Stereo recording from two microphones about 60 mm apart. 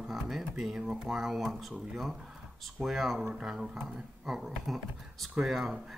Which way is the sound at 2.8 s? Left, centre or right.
Centre.